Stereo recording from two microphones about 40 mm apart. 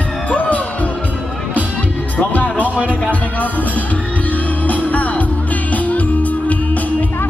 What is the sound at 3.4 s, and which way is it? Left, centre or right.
Music, left.